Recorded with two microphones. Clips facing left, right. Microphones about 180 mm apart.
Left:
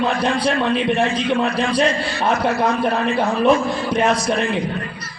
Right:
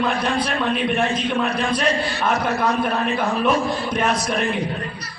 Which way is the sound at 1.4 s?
30° left (ahead or behind).